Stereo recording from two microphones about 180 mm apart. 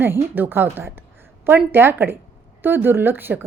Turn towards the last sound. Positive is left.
turn(degrees=-10)  # may be behind; listen again after turning